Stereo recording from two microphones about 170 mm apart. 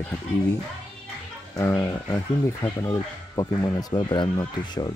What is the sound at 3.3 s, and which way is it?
Speech, 20° left (ahead or behind).